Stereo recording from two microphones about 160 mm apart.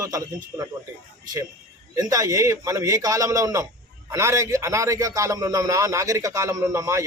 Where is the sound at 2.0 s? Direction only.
20° right (ahead or behind).